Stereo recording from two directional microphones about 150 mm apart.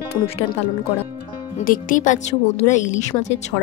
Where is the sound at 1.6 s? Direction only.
60° left (ahead or behind).